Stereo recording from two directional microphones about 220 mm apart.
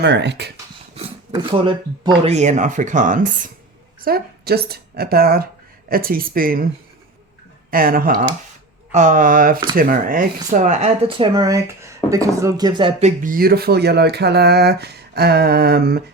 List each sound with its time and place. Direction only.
0.0 s speech: 50° right (ahead or behind)
0.9 s speech: 25° right (ahead or behind); by 6.7 s 40° right (ahead or behind)
7.7 s speech: 40° right (ahead or behind)
11.3 s speech: 15° right (ahead or behind); by 16.0 s 45° right (ahead or behind)